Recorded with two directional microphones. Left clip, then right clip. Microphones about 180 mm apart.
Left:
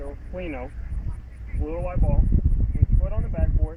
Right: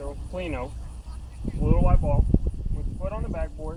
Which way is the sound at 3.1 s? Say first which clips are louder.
Right 1 dB; 15° right (ahead or behind).